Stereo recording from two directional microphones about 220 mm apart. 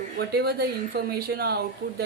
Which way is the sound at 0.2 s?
45° right (ahead or behind).